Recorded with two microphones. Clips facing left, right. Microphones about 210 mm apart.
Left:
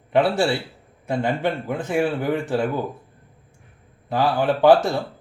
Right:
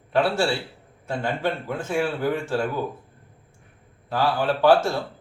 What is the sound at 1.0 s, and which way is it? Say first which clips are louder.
Speech: left 3 dB; 20° left (ahead or behind).